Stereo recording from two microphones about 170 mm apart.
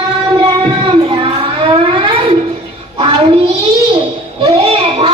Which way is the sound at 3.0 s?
30° right (ahead or behind).